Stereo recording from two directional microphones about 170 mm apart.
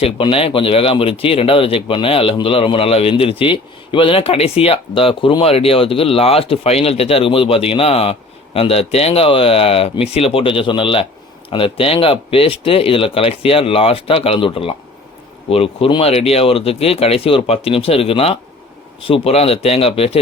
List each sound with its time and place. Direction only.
0.0 s speech: 35° left (ahead or behind)